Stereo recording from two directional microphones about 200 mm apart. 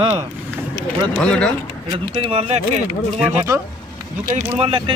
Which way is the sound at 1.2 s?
5° left (ahead or behind).